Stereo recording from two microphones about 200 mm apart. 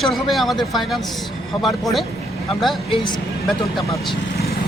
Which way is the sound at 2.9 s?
20° left (ahead or behind).